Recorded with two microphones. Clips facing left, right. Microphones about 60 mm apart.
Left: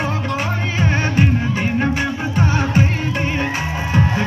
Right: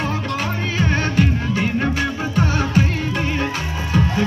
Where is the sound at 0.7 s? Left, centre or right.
Centre.